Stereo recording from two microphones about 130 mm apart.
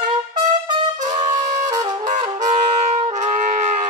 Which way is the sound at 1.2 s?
30° right (ahead or behind).